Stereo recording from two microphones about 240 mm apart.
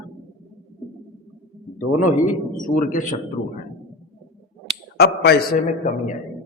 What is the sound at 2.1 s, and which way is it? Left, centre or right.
A man's voice, left.